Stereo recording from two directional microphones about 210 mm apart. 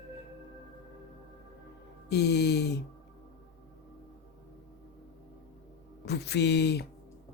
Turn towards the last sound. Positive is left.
turn(degrees=55)  # may be behind; listen again after turning